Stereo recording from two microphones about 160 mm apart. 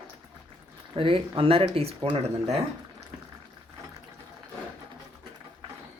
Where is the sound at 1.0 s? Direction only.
35° right (ahead or behind).